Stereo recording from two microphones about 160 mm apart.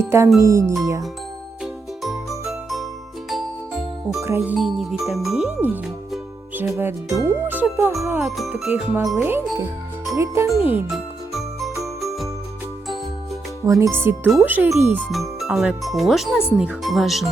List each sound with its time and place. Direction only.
0.0 s a child's voice: 15° right (ahead or behind)
2.0 s jingle: centre (ahead or behind)
4.2 s a child's voice: 15° right (ahead or behind)
4.5 s speech: centre (ahead or behind)
6.6 s a child's voice: 15° right (ahead or behind)
10.9 s music: centre (ahead or behind)
13.7 s a child's voice: 20° right (ahead or behind)
15.1 s speech: centre (ahead or behind)